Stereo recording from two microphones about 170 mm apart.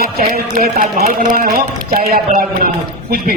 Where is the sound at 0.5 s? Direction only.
60° right (ahead or behind).